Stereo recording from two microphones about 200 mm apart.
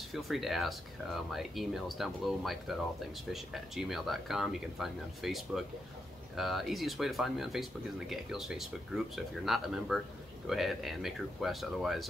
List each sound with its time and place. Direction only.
0.1 s speech: centre (ahead or behind)